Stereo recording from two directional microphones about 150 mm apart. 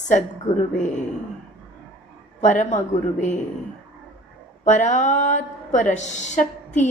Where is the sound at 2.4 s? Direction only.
55° left (ahead or behind).